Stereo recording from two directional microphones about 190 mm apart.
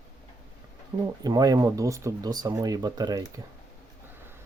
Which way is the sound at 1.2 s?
20° right (ahead or behind).